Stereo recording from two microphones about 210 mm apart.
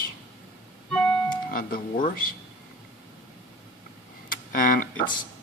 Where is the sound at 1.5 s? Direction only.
40° left (ahead or behind).